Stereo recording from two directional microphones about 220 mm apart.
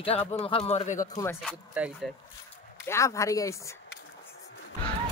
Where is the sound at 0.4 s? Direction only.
25° left (ahead or behind).